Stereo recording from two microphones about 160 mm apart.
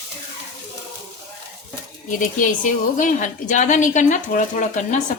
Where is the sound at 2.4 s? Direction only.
55° left (ahead or behind).